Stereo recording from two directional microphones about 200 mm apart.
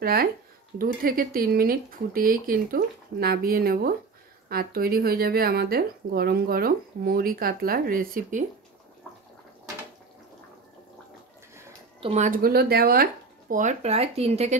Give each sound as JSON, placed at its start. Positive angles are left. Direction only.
{"t": 0.0, "sound": "speech", "side_deg": -50}
{"t": 12.0, "sound": "speech", "side_deg": -35}